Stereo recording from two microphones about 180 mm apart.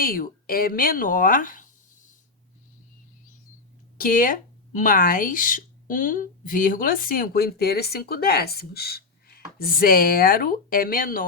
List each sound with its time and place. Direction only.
0.0 s speech: 55° left (ahead or behind)
3.9 s speech: 50° left (ahead or behind)